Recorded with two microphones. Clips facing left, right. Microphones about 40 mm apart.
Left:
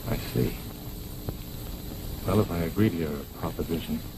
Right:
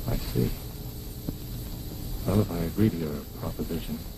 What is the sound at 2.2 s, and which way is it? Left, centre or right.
Speech, left.